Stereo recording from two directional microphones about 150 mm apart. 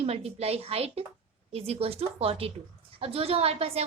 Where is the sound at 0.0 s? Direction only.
45° right (ahead or behind).